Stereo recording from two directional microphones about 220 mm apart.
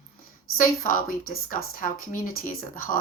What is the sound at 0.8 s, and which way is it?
Speech, 40° left (ahead or behind).